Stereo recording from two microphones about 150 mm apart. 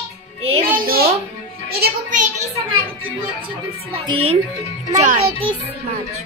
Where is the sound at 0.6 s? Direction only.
75° right (ahead or behind).